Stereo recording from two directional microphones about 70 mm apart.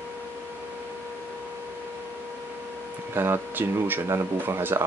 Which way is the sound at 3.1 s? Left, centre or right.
Right.